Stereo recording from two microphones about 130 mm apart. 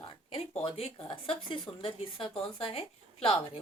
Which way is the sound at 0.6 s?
40° left (ahead or behind).